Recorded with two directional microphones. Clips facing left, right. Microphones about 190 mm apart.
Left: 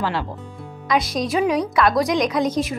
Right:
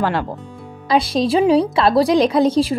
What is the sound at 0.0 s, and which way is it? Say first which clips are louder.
Speech: right 4 dB; 50° right (ahead or behind).